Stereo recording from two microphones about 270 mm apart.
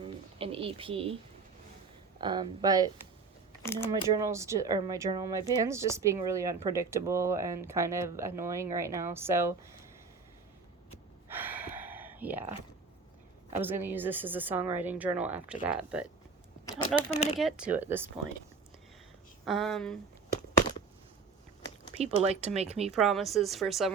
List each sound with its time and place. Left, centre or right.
0.0 s a sound: right
2.2 s speech: centre
3.7 s speech: centre
4.1 s speech: centre
11.3 s gasp: centre
13.6 s a woman's voice: centre
17.4 s a woman's voice: centre
19.5 s a woman's voice: centre
21.9 s speech: right
22.9 s a woman's voice: centre